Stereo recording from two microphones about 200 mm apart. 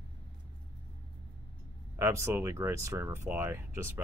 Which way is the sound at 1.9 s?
15° right (ahead or behind).